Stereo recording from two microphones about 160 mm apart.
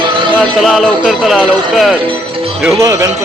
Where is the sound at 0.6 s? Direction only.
Centre (ahead or behind).